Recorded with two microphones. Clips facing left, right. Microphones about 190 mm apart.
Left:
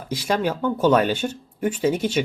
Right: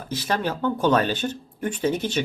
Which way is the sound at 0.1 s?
10° left (ahead or behind).